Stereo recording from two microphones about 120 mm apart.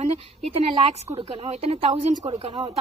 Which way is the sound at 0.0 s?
65° right (ahead or behind).